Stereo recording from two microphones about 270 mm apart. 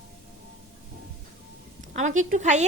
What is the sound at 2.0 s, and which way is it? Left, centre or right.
Speech, right.